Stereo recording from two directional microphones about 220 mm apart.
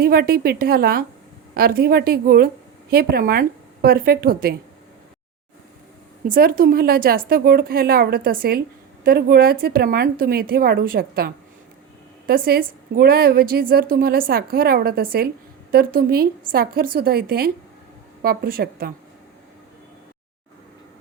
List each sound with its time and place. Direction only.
0.0 s a woman's voice: 45° right (ahead or behind)
6.2 s a woman's voice: 40° right (ahead or behind)